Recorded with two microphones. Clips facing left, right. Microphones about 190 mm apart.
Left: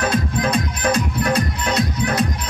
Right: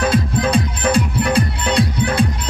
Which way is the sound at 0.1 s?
30° right (ahead or behind).